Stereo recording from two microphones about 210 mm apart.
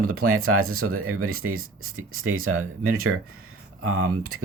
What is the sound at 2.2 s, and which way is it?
Speech, 75° right (ahead or behind).